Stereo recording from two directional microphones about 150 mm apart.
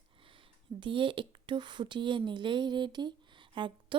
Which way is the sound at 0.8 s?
35° right (ahead or behind).